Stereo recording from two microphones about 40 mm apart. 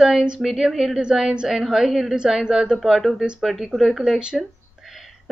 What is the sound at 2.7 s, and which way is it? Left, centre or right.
Speech, centre.